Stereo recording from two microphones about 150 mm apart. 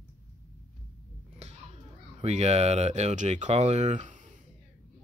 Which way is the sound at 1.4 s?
45° right (ahead or behind).